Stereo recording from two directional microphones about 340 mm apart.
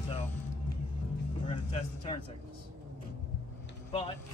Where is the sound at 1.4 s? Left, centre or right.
Centre.